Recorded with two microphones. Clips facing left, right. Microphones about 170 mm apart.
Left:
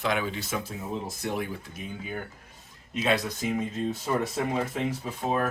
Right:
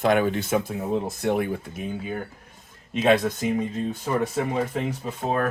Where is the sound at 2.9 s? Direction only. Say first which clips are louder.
Right 7 dB; 50° right (ahead or behind).